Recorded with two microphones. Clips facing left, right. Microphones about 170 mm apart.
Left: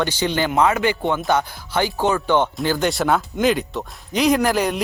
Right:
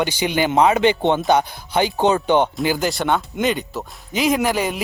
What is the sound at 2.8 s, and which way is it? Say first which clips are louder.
Speech: left 1 dB; centre (ahead or behind).